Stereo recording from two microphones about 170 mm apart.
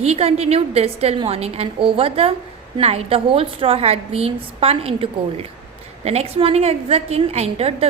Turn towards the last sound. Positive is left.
turn(degrees=-35)  # may be behind; listen again after turning